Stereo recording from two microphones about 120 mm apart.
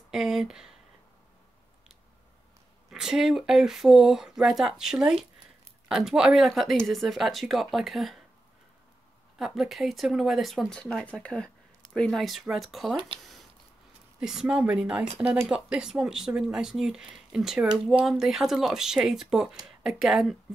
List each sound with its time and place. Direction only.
0.1 s speech: 5° right (ahead or behind)
2.9 s speech: 5° right (ahead or behind)
9.4 s speech: centre (ahead or behind)
13.2 s a sound: centre (ahead or behind)
14.2 s speech: 5° right (ahead or behind)